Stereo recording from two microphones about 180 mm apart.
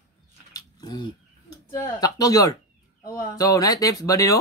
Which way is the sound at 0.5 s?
20° left (ahead or behind).